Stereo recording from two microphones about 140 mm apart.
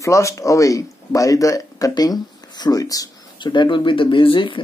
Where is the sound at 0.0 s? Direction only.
20° left (ahead or behind).